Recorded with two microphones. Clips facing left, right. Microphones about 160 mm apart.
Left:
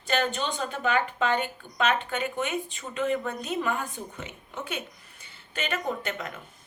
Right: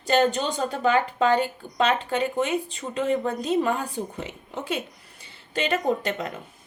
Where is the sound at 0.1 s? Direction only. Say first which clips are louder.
Right 6 dB; 40° right (ahead or behind).